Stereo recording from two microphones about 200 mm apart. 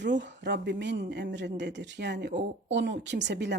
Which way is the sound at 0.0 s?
60° right (ahead or behind).